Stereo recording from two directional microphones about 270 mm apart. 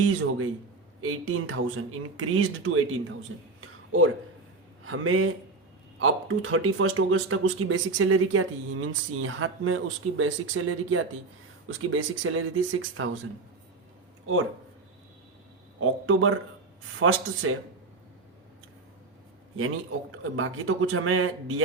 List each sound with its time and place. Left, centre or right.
0.0 s speech: right
15.8 s speech: right
19.5 s speech: right